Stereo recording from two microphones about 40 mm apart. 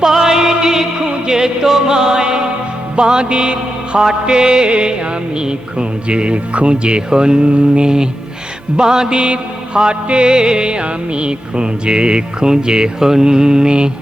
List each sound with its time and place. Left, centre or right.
0.0 s music: centre